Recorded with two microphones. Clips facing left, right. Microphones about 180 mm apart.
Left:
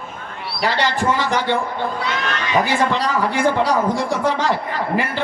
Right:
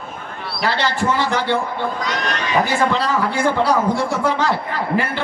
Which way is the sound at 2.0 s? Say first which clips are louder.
Even; 40° right (ahead or behind).